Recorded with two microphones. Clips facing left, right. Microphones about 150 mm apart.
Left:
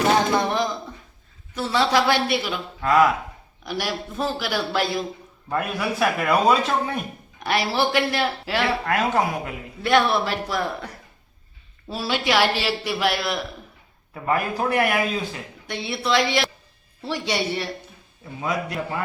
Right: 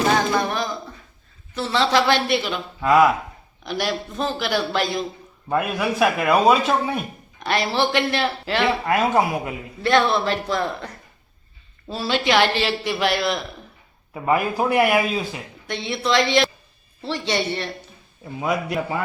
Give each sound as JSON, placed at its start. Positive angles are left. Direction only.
{"t": 0.3, "sound": "singing", "side_deg": 20}
{"t": 1.5, "sound": "speech", "side_deg": 10}
{"t": 2.8, "sound": "speech", "side_deg": -5}
{"t": 3.7, "sound": "a man's voice", "side_deg": 5}
{"t": 5.5, "sound": "speech", "side_deg": -5}
{"t": 7.3, "sound": "speech", "side_deg": 10}
{"t": 8.8, "sound": "speech", "side_deg": -5}
{"t": 9.8, "sound": "a man's voice", "side_deg": 10}
{"t": 14.1, "sound": "speech", "side_deg": -15}
{"t": 15.7, "sound": "a man's voice", "side_deg": 5}
{"t": 18.3, "sound": "speech", "side_deg": -10}